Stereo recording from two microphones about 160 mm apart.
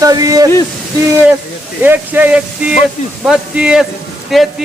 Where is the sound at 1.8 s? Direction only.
10° right (ahead or behind).